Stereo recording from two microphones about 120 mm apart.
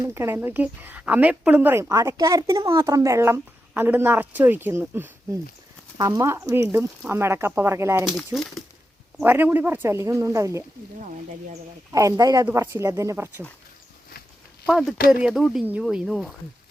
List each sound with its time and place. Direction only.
0.1 s speech: 20° right (ahead or behind)
8.0 s speech: centre (ahead or behind)
9.2 s speech: 20° right (ahead or behind)
11.9 s speech: 30° right (ahead or behind)
14.7 s speech: 5° right (ahead or behind)